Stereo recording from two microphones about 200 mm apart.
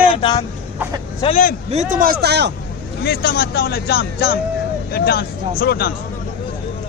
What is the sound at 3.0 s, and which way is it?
Speech, 50° left (ahead or behind).